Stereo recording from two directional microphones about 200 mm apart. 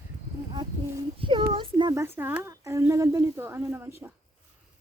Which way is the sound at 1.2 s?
25° right (ahead or behind).